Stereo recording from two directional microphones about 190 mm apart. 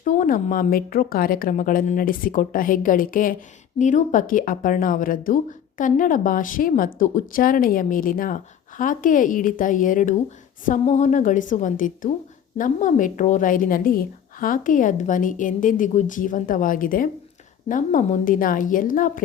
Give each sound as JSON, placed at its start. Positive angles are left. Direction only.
{"t": 0.0, "sound": "a woman's voice", "side_deg": 45}